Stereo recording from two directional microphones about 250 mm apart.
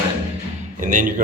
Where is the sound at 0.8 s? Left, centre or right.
Right.